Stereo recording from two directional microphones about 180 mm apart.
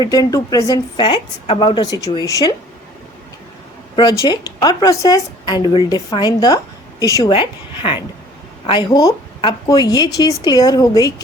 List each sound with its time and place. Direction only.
0.0 s a woman's voice: 20° left (ahead or behind)
3.9 s a woman's voice: 20° left (ahead or behind)